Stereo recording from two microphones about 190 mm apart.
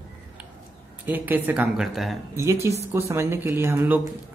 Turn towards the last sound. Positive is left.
turn(degrees=-10)  # may be behind; listen again after turning